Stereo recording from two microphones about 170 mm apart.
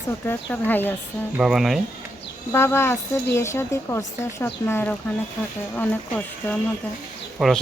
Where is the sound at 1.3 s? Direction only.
Centre (ahead or behind).